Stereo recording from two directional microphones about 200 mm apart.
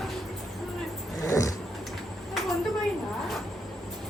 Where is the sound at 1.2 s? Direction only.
15° left (ahead or behind).